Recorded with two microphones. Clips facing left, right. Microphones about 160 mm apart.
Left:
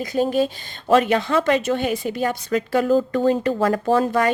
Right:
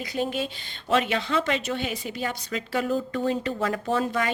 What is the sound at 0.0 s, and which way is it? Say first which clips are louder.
A woman's voice: left 8 dB; 45° left (ahead or behind).